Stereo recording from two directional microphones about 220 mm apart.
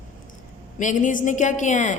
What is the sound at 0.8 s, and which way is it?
A woman's voice, 35° left (ahead or behind).